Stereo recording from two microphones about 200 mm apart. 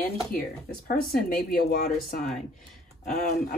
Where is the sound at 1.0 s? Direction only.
50° left (ahead or behind).